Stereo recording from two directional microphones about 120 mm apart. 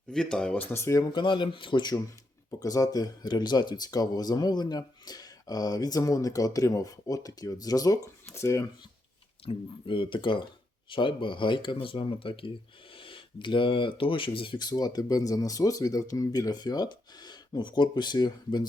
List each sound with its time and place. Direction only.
0.1 s speech: 5° left (ahead or behind)
0.7 s speech: 25° left (ahead or behind)
9.5 s speech: 45° left (ahead or behind)